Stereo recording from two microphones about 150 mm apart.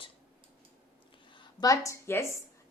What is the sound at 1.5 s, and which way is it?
Speech, 25° left (ahead or behind).